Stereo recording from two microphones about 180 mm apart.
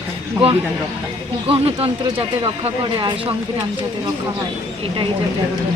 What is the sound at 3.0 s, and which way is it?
Speech, 25° right (ahead or behind).